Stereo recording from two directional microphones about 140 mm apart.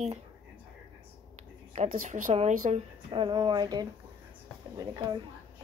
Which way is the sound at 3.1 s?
35° right (ahead or behind).